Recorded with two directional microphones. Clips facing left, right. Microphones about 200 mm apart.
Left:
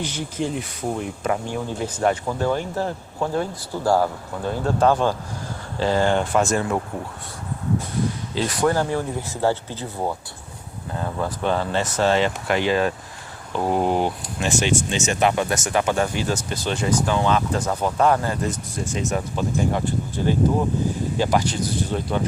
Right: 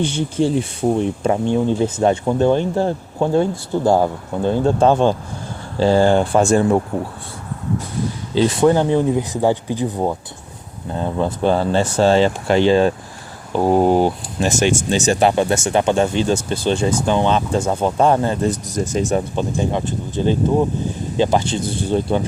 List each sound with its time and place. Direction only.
0.0 s speech: 30° right (ahead or behind)
8.4 s speech: 25° right (ahead or behind)
13.5 s speech: 40° right (ahead or behind)